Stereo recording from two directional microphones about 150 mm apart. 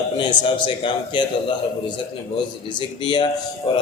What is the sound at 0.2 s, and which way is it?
A man's voice, 35° left (ahead or behind).